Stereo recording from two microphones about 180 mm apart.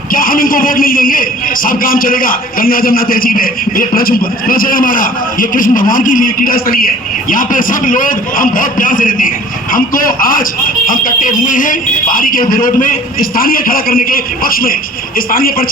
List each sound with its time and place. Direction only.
0.1 s a man's voice: 50° left (ahead or behind)